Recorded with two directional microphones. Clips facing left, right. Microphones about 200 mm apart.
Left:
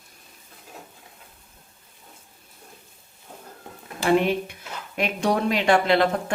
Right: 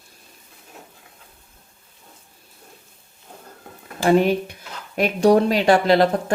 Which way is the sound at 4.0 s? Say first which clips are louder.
Right 4 dB; 40° right (ahead or behind).